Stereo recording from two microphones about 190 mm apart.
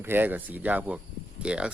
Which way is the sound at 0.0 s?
10° right (ahead or behind).